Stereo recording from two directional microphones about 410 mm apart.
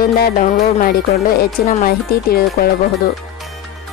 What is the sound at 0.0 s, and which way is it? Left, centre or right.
Speech, left.